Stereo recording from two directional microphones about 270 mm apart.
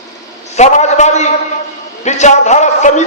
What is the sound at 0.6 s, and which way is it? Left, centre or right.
A man's voice, left.